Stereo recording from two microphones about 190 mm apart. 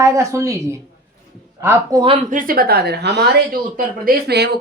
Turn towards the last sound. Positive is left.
turn(degrees=-60)  # may be behind; listen again after turning